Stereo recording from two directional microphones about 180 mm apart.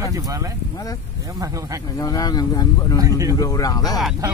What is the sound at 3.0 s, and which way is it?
Speech, 20° right (ahead or behind).